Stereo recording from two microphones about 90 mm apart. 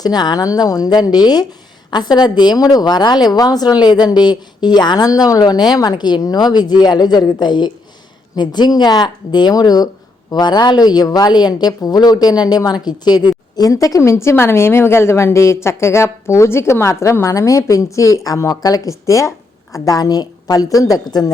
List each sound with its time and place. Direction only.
0.0 s a woman's voice: 50° left (ahead or behind)